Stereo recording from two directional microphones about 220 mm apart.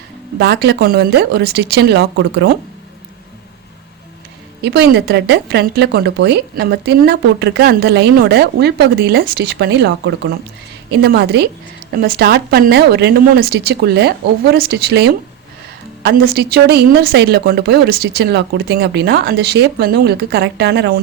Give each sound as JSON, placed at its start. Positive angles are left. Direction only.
{"t": 0.3, "sound": "speech", "side_deg": -45}
{"t": 4.6, "sound": "speech", "side_deg": -50}